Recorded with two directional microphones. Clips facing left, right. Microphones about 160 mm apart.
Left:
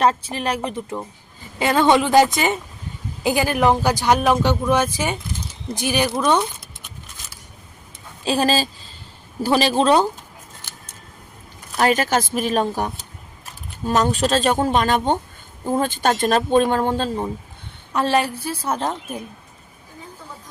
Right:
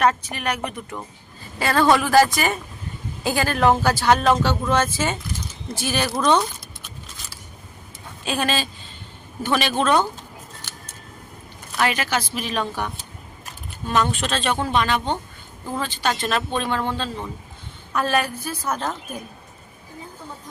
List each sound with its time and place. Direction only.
0.0 s speech: 30° left (ahead or behind); by 6.5 s 10° left (ahead or behind)
8.2 s speech: 35° left (ahead or behind)
11.8 s speech: 40° left (ahead or behind)
17.9 s speech: 30° left (ahead or behind)